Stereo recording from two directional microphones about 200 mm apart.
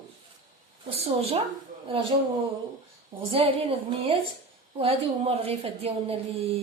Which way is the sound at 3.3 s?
30° right (ahead or behind).